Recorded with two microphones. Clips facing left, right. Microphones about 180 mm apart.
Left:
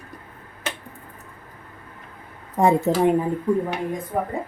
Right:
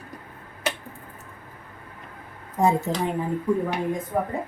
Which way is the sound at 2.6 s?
60° left (ahead or behind).